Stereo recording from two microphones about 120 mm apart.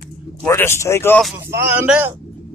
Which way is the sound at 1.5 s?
20° right (ahead or behind).